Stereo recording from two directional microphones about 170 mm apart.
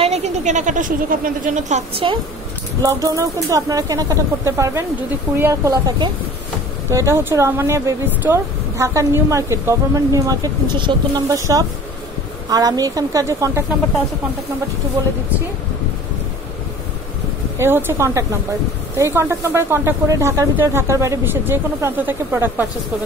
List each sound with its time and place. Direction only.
0.0 s a woman's voice: 40° right (ahead or behind)
2.8 s a woman's voice: 20° right (ahead or behind)
17.6 s a woman's voice: 15° right (ahead or behind)